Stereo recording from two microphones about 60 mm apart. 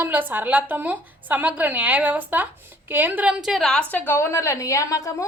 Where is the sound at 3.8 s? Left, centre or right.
Left.